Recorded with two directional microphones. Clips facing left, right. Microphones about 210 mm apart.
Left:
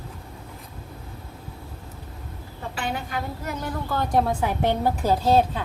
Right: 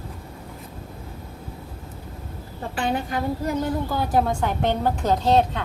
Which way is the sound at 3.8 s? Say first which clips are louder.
Left 4 dB; 10° right (ahead or behind).